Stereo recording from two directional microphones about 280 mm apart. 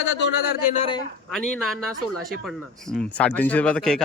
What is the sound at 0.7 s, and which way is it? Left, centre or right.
Speech, centre.